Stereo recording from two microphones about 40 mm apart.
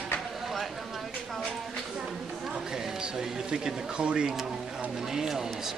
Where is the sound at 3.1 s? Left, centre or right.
Right.